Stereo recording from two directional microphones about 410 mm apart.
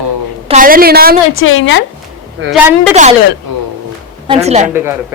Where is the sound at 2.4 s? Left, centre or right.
Right.